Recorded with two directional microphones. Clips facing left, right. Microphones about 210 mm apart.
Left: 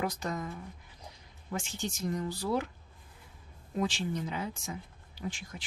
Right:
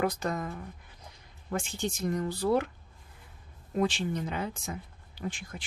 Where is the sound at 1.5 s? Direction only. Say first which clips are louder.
Right 4 dB; 55° right (ahead or behind).